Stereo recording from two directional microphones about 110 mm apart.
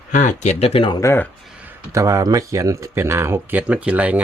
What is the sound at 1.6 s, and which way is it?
Speech, 30° right (ahead or behind).